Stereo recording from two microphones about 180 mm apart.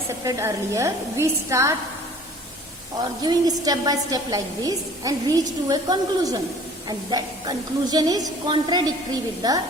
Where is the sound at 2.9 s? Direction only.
20° right (ahead or behind).